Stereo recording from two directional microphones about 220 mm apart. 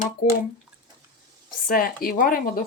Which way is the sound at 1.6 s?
40° left (ahead or behind).